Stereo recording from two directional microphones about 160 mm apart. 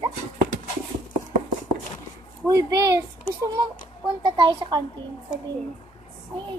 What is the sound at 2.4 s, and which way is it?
Speech, 20° right (ahead or behind).